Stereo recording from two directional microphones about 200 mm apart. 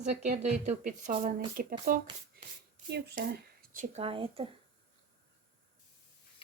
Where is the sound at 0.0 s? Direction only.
35° right (ahead or behind).